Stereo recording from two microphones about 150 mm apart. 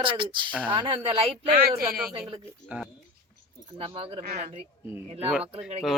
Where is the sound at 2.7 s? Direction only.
10° right (ahead or behind).